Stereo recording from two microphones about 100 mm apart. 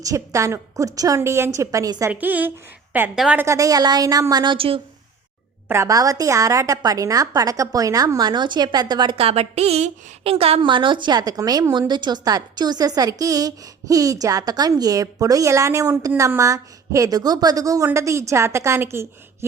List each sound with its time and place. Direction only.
0.0 s a woman's voice: 30° right (ahead or behind)
2.0 s a woman's voice: 15° right (ahead or behind)
3.4 s a woman's voice: 35° right (ahead or behind)
4.5 s a woman's voice: 70° right (ahead or behind)
5.6 s a woman's voice: 30° right (ahead or behind); by 9.1 s 45° right (ahead or behind)
9.1 s speech: 90° right
10.2 s a woman's voice: 70° right (ahead or behind); by 19.5 s 25° right (ahead or behind)